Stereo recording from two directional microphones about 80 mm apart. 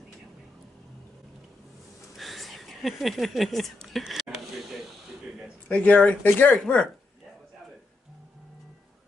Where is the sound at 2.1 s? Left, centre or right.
Centre.